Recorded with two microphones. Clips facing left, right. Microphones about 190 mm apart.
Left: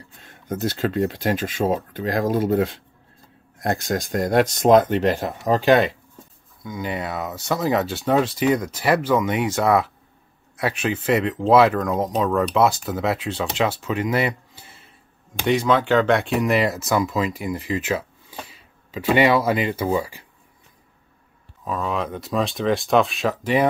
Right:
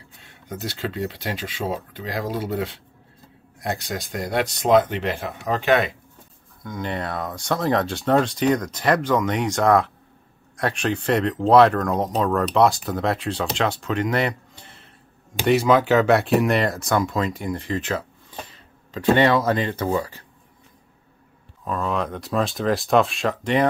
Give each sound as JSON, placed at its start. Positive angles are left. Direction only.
{"t": 0.2, "sound": "speech", "side_deg": 45}
{"t": 6.6, "sound": "speech", "side_deg": 5}
{"t": 15.4, "sound": "speech", "side_deg": -5}
{"t": 21.6, "sound": "speech", "side_deg": 0}